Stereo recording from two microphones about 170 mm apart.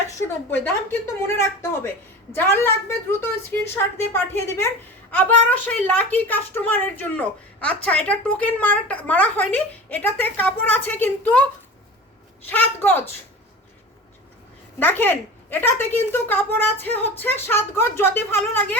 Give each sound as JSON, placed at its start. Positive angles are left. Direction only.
{"t": 0.3, "sound": "speech", "side_deg": 15}
{"t": 12.5, "sound": "speech", "side_deg": 10}
{"t": 14.8, "sound": "speech", "side_deg": 10}